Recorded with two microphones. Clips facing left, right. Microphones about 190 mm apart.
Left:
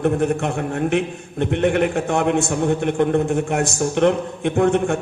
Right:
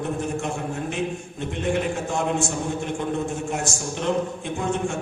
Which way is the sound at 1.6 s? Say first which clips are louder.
Left 5 dB; 65° left (ahead or behind).